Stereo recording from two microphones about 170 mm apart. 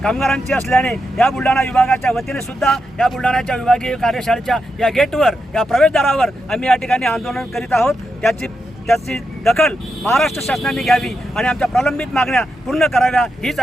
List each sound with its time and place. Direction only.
0.0 s speech: centre (ahead or behind)